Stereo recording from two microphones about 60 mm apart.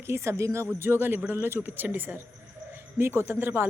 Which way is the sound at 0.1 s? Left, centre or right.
Right.